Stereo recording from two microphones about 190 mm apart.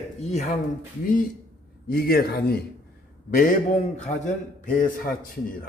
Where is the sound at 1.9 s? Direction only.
50° left (ahead or behind).